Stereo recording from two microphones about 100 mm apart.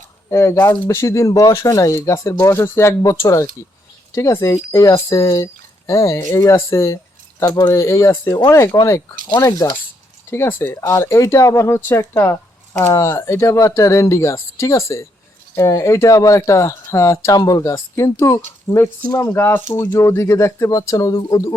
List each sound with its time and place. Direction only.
0.3 s speech: 25° left (ahead or behind)
9.5 s speech: 40° left (ahead or behind)
10.2 s speech: 25° left (ahead or behind); by 17.6 s 40° left (ahead or behind)
17.6 s speech: 30° left (ahead or behind)